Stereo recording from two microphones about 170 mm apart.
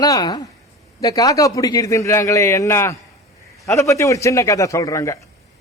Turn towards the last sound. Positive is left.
turn(degrees=20)  # may be behind; listen again after turning